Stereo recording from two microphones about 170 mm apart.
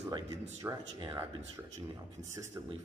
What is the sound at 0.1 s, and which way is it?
Speech, 20° right (ahead or behind).